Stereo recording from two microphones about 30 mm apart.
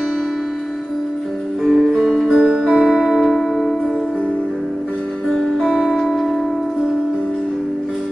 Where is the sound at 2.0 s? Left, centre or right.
Centre.